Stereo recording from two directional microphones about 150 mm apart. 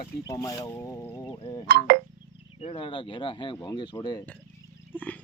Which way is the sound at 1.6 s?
90° right.